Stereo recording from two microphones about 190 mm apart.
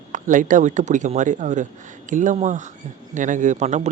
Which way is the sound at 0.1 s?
40° right (ahead or behind).